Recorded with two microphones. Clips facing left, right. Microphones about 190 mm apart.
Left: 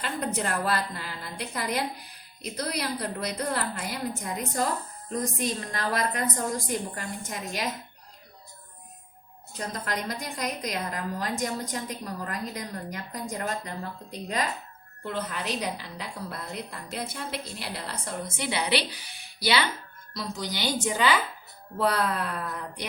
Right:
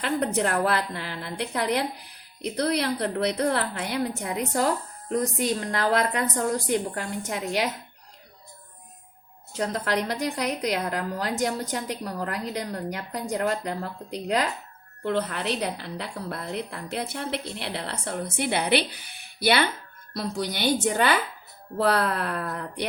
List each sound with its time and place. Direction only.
0.0 s a woman's voice: 65° right (ahead or behind)
9.5 s a woman's voice: 70° right (ahead or behind)